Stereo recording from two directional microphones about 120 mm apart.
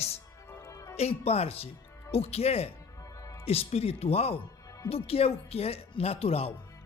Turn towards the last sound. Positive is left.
turn(degrees=55)  # may be behind; listen again after turning